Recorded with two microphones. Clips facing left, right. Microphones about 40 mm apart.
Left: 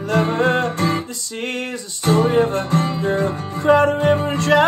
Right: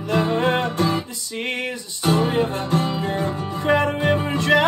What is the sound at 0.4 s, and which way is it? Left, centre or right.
Music, right.